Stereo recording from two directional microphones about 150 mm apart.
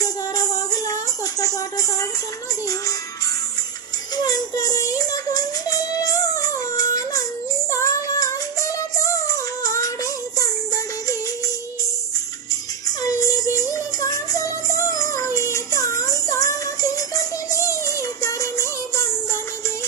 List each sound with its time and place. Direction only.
0.0 s music: 25° left (ahead or behind)
4.1 s music: 25° left (ahead or behind)
7.7 s synthetic singing: 20° left (ahead or behind)
9.1 s music: 20° left (ahead or behind)
13.0 s music: 25° left (ahead or behind)